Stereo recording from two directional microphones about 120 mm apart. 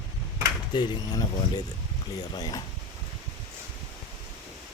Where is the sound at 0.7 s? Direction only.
35° left (ahead or behind).